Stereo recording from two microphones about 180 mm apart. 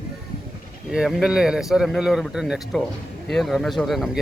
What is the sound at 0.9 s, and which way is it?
Speech, centre (ahead or behind).